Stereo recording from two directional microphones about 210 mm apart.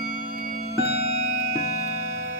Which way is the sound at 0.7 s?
50° left (ahead or behind).